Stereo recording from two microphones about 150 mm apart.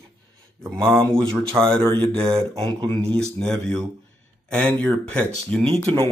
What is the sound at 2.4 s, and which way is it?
Speech, 30° right (ahead or behind).